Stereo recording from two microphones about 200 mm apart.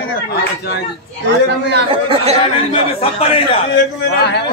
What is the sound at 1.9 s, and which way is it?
Speech, 25° right (ahead or behind).